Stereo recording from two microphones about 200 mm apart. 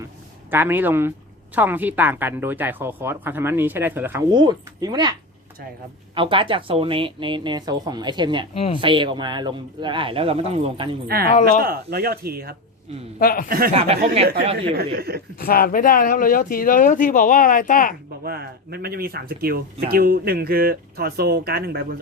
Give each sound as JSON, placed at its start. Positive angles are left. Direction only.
{"t": 0.5, "sound": "speech", "side_deg": -10}
{"t": 6.1, "sound": "speech", "side_deg": -25}
{"t": 8.5, "sound": "speech", "side_deg": 30}
{"t": 8.8, "sound": "speech", "side_deg": -25}
{"t": 11.6, "sound": "speech", "side_deg": -50}
{"t": 13.1, "sound": "speech", "side_deg": 45}
{"t": 13.7, "sound": "speech", "side_deg": -30}
{"t": 14.9, "sound": "speech", "side_deg": -50}
{"t": 15.4, "sound": "speech", "side_deg": 45}
{"t": 18.2, "sound": "speech", "side_deg": -50}